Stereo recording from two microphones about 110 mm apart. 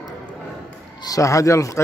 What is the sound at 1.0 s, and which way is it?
Speech, 30° left (ahead or behind).